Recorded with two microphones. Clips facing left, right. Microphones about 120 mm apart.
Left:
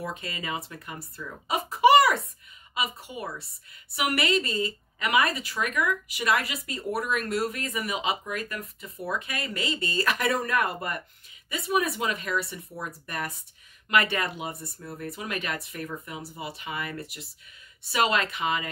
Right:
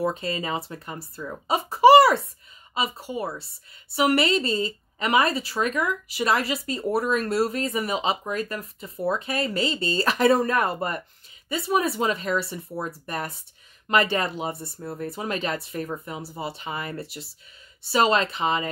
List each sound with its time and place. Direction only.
0.0 s a woman's voice: 30° right (ahead or behind)